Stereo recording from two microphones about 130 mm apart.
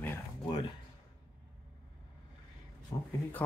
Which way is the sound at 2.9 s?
30° left (ahead or behind).